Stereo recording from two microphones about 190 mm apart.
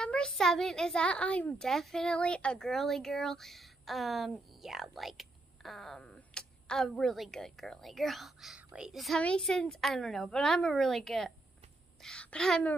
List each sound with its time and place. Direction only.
0.0 s a child's voice: 5° left (ahead or behind)